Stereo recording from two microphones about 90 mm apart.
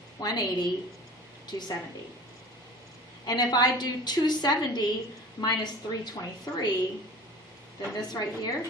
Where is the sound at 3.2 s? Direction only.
50° left (ahead or behind).